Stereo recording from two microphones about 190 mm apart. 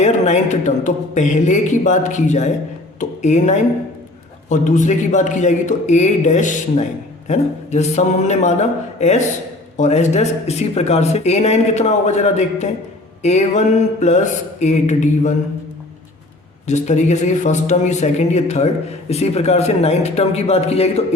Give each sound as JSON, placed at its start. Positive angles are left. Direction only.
{"t": 0.0, "sound": "speech", "side_deg": 40}
{"t": 16.6, "sound": "speech", "side_deg": 35}